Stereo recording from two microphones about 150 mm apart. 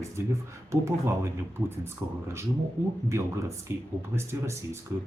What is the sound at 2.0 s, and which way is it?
Speech, 20° right (ahead or behind).